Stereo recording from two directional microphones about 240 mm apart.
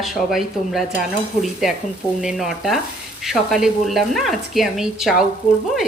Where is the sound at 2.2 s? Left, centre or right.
Centre.